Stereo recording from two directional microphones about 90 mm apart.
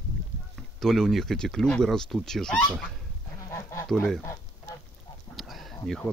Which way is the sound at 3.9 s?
5° left (ahead or behind).